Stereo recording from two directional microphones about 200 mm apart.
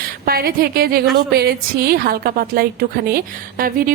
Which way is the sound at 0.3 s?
50° right (ahead or behind).